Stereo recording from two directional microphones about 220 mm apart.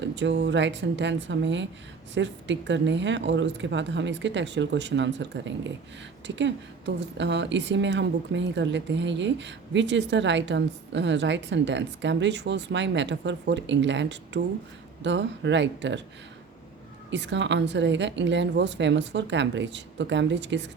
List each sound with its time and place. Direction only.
0.0 s a woman's voice: 55° right (ahead or behind)
17.1 s a woman's voice: 55° right (ahead or behind)